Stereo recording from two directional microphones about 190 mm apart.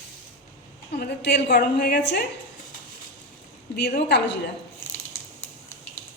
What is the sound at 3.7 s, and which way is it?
Speech, 60° left (ahead or behind).